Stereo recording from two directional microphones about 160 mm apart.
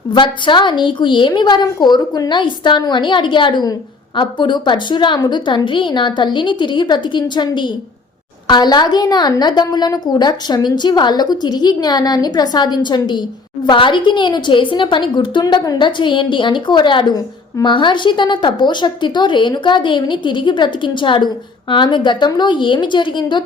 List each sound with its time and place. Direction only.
0.1 s a woman's voice: 30° left (ahead or behind)